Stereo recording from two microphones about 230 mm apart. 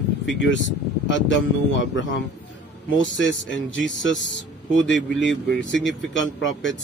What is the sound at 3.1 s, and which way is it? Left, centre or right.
Speech, left.